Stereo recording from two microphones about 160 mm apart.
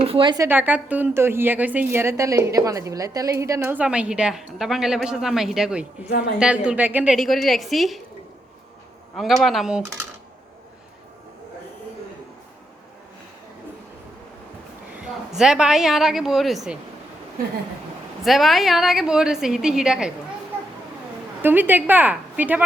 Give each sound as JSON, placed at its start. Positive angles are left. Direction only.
{"t": 0.0, "sound": "speech", "side_deg": -35}
{"t": 0.3, "sound": "a woman's voice", "side_deg": -10}
{"t": 6.1, "sound": "speech", "side_deg": 80}
{"t": 6.4, "sound": "a woman's voice", "side_deg": -5}
{"t": 9.1, "sound": "a woman's voice", "side_deg": 0}
{"t": 15.3, "sound": "a woman's voice", "side_deg": -5}
{"t": 18.2, "sound": "a woman's voice", "side_deg": 0}
{"t": 21.4, "sound": "a woman's voice", "side_deg": -10}